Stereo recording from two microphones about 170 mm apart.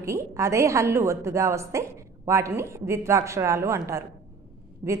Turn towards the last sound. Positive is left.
turn(degrees=-25)  # may be behind; listen again after turning